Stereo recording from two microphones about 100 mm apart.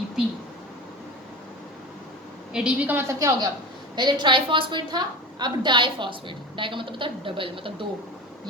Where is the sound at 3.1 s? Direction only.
35° right (ahead or behind).